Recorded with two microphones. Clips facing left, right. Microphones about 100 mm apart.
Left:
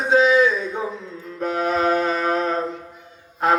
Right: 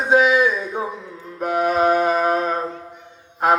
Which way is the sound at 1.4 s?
15° right (ahead or behind).